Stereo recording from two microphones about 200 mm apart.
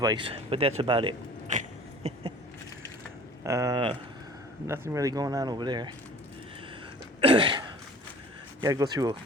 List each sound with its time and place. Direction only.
0.0 s speech: 25° right (ahead or behind)
3.4 s speech: 15° right (ahead or behind)
7.2 s a sound: 25° right (ahead or behind)
8.6 s speech: 20° right (ahead or behind)